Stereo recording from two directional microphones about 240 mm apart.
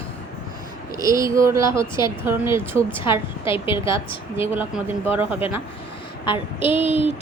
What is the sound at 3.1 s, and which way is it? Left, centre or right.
Speech, left.